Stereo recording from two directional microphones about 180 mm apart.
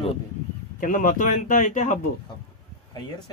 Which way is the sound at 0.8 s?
45° left (ahead or behind).